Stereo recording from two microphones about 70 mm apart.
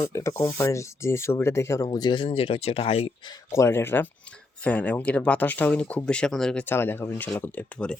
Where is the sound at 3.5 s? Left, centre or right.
Left; by 6.7 s centre.